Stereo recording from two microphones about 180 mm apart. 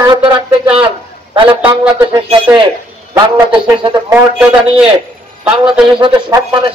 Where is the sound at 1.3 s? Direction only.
30° right (ahead or behind).